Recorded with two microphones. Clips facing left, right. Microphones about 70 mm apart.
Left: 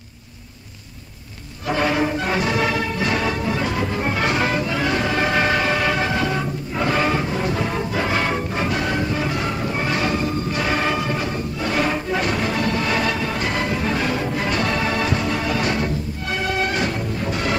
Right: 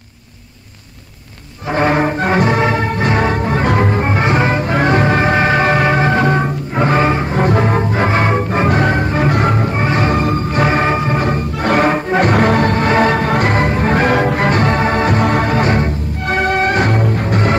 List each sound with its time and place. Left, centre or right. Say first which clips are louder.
1.7 s music: right 6 dB; right
4.0 s music: right 6 dB; right
4.7 s music: right 7 dB; right
7.3 s music: right 8 dB; right